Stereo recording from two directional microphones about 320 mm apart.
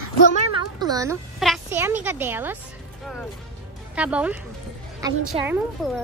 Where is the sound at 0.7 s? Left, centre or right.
Centre.